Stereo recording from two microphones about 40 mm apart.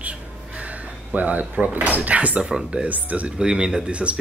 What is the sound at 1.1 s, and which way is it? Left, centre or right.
Speech, right.